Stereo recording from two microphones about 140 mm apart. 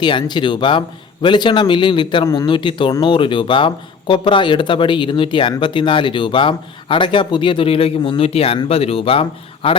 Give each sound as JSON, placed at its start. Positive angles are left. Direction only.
{"t": 0.0, "sound": "speech", "side_deg": 30}